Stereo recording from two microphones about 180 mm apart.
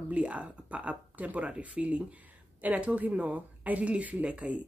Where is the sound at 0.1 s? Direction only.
5° right (ahead or behind).